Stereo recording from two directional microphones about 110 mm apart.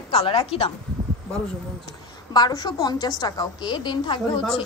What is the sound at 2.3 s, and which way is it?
A woman's voice, 40° left (ahead or behind).